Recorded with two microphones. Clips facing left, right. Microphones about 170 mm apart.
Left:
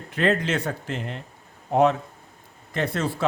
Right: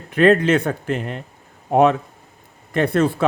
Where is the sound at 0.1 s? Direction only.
60° right (ahead or behind).